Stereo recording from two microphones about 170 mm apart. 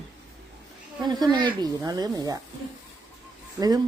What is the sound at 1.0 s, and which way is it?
Speech, 25° right (ahead or behind).